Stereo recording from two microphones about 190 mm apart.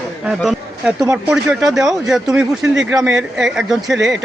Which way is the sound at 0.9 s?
15° right (ahead or behind).